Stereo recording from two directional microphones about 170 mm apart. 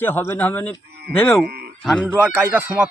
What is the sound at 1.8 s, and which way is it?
Speech, 5° left (ahead or behind).